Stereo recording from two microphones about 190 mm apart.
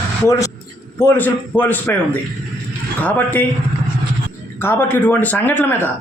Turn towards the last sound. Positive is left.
turn(degrees=10)  # may be behind; listen again after turning